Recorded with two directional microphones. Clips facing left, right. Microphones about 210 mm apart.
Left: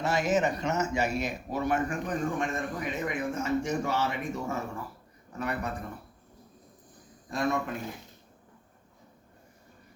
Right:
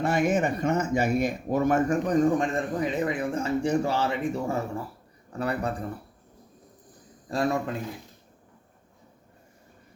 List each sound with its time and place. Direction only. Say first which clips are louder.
0.0 s a man's voice: right 3 dB; 55° right (ahead or behind); by 5.7 s 30° right (ahead or behind)
7.3 s a man's voice: right 3 dB; 30° right (ahead or behind)